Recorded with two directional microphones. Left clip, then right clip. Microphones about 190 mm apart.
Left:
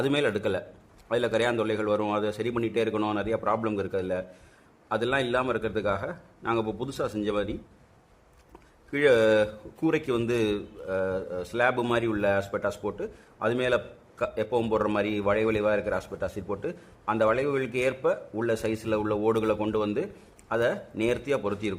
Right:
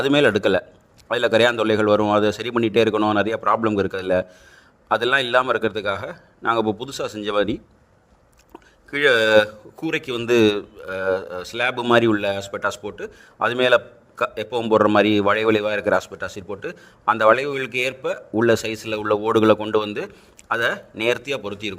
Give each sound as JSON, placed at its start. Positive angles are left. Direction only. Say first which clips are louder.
{"t": 0.0, "sound": "a man's voice", "louder": "right 9 dB", "side_deg": -35}
{"t": 8.9, "sound": "a man's voice", "louder": "right 5 dB", "side_deg": -40}
{"t": 21.3, "sound": "speech", "louder": "even", "side_deg": -10}